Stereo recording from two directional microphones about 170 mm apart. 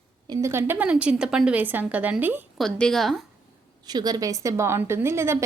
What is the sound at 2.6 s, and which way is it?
Speech, 5° left (ahead or behind).